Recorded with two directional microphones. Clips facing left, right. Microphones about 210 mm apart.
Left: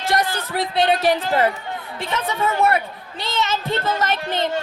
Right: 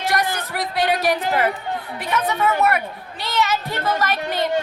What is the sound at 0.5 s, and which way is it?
A woman's voice, 25° left (ahead or behind).